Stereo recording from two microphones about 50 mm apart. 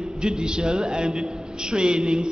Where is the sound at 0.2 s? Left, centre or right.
Centre.